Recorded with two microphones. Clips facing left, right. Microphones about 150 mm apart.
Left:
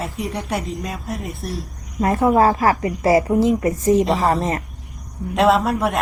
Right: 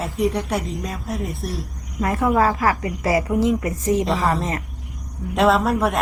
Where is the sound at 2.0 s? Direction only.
25° left (ahead or behind).